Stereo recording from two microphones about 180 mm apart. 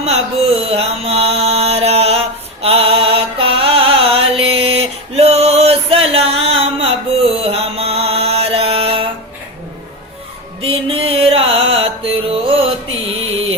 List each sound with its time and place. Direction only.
0.0 s mantra: 35° right (ahead or behind)
10.6 s music: 30° right (ahead or behind)